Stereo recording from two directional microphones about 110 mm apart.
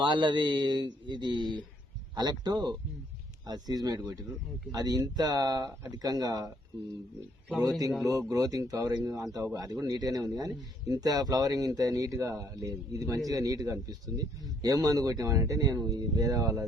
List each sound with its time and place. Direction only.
0.0 s a man's voice: 45° right (ahead or behind)
7.6 s speech: 35° right (ahead or behind)